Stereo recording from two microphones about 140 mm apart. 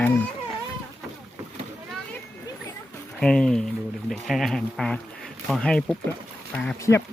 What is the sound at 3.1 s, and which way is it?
Speech, 5° left (ahead or behind).